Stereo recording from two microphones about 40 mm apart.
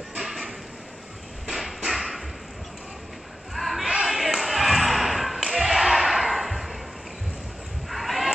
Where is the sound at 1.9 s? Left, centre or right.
Centre.